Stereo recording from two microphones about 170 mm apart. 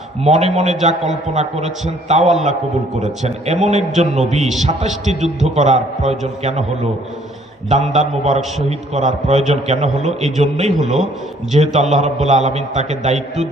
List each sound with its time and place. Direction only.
0.3 s a man's voice: 40° right (ahead or behind)
5.5 s a man's voice: 40° right (ahead or behind)
7.7 s a man's voice: 40° right (ahead or behind)